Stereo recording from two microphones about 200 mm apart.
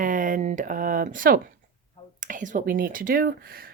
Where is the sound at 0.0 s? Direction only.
40° right (ahead or behind).